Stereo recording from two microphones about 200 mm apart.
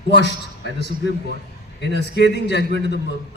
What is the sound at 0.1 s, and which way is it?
Speech, 55° left (ahead or behind).